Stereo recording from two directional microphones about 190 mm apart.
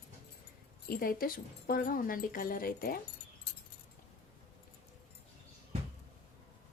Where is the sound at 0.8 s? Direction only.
50° left (ahead or behind).